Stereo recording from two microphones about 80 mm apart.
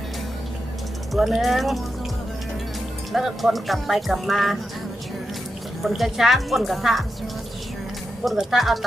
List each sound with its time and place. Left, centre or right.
1.1 s speech: centre
3.1 s speech: centre
5.8 s speech: centre
8.2 s speech: centre